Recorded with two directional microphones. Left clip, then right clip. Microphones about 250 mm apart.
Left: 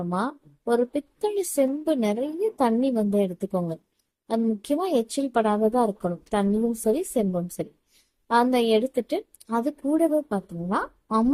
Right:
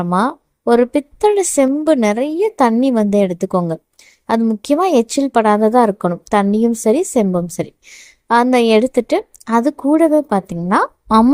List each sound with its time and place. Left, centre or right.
0.0 s a woman's voice: right